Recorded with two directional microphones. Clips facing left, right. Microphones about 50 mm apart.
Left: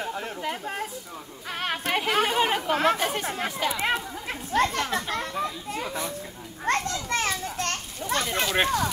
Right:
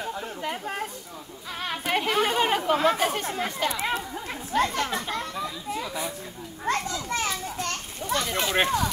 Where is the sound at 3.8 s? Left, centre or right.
Left.